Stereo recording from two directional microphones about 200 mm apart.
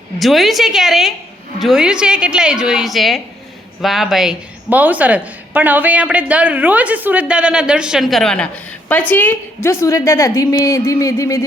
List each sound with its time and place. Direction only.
0.2 s a woman's voice: centre (ahead or behind); by 11.4 s 15° left (ahead or behind)